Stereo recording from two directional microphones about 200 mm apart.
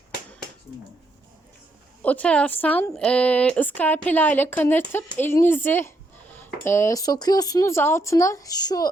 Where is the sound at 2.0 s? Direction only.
5° left (ahead or behind).